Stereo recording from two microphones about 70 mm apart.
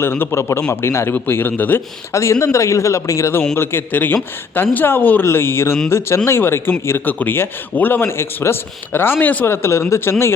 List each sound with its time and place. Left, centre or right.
0.0 s speech: left
2.1 s a man's voice: left
3.5 s speech: left
5.2 s speech: left